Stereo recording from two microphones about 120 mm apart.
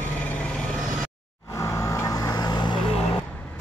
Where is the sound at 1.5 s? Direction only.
25° left (ahead or behind).